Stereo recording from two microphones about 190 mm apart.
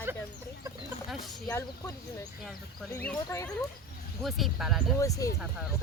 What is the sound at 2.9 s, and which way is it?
Speech, 10° left (ahead or behind).